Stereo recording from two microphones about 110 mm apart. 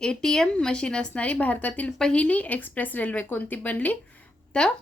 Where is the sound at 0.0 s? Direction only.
5° left (ahead or behind).